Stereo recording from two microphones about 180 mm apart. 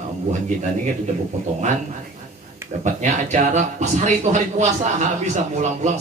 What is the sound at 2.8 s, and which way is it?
Speech, 40° right (ahead or behind).